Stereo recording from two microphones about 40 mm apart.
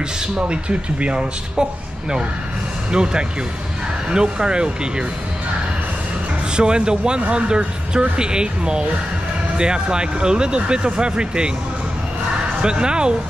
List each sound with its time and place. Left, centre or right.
0.5 s speech: right
6.5 s speech: right
12.6 s speech: right